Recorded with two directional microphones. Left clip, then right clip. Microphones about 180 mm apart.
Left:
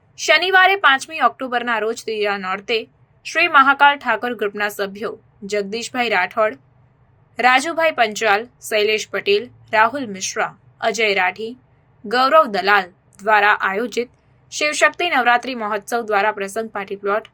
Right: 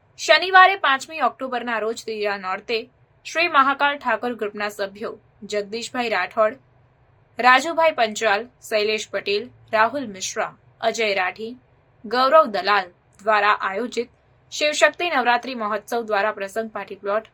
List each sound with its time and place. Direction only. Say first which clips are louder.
0.2 s a woman's voice: even; 15° left (ahead or behind)